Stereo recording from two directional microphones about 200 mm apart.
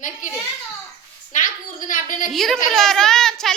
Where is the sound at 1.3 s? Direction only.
40° left (ahead or behind).